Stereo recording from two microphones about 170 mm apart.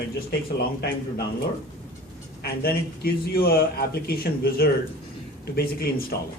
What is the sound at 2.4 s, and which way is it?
Speech, 65° left (ahead or behind).